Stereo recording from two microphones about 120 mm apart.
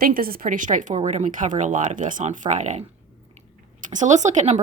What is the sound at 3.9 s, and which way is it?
Speech, 85° right.